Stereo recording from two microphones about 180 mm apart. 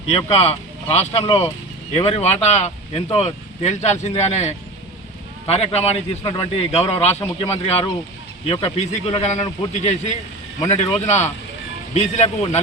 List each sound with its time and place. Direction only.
0.1 s speech: 35° left (ahead or behind)